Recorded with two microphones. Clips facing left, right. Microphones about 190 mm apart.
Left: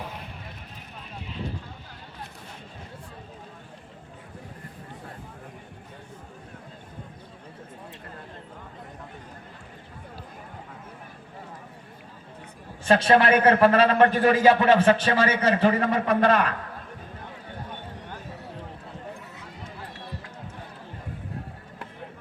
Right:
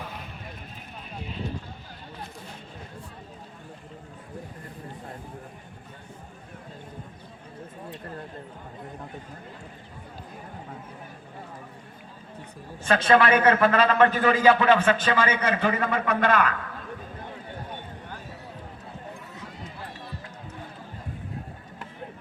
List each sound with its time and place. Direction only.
12.9 s a man's voice: 30° left (ahead or behind)